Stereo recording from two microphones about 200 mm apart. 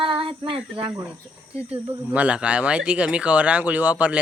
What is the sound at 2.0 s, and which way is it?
Speech, 5° right (ahead or behind).